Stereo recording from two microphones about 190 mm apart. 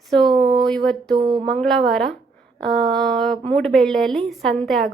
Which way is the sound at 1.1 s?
25° right (ahead or behind).